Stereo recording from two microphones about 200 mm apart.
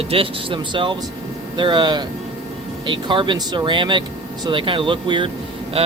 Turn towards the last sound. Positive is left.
turn(degrees=-30)  # may be behind; listen again after turning